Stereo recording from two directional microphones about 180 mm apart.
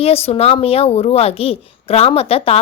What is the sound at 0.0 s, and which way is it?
A child's voice, 35° left (ahead or behind).